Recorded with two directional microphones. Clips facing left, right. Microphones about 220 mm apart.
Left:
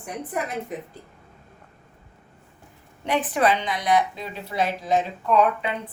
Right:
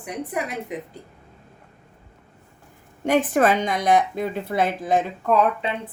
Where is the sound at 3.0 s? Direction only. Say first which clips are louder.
Right 4 dB; 45° right (ahead or behind).